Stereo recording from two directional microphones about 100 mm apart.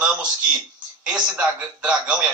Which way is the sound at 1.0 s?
10° right (ahead or behind).